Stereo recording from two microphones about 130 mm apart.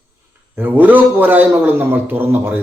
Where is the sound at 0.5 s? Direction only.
15° right (ahead or behind).